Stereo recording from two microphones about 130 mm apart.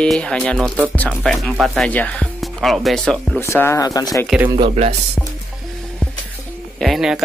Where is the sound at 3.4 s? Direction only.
20° left (ahead or behind).